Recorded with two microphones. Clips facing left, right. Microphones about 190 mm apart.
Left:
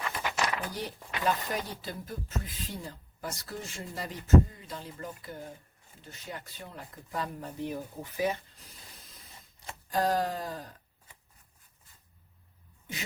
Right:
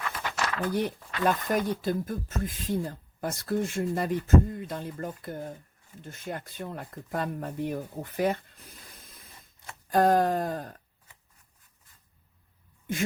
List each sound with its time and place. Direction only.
0.2 s a sound: 15° left (ahead or behind)
0.7 s speech: 55° right (ahead or behind)
9.9 s speech: 55° right (ahead or behind)